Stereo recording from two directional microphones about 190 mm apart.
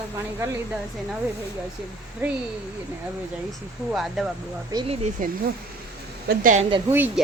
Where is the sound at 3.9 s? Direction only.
Centre (ahead or behind).